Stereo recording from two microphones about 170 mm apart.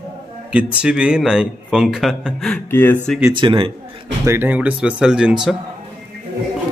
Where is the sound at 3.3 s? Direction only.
30° right (ahead or behind).